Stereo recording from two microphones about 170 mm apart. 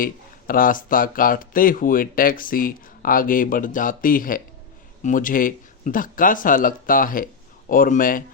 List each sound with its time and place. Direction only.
0.0 s speech: 55° left (ahead or behind)